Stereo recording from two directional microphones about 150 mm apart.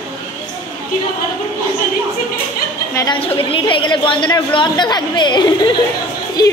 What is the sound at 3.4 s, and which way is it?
A woman's voice, 35° left (ahead or behind).